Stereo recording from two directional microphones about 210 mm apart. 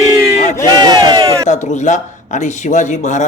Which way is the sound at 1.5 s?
35° left (ahead or behind).